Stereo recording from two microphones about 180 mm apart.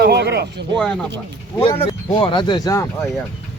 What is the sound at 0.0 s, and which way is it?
Speech, 65° right (ahead or behind).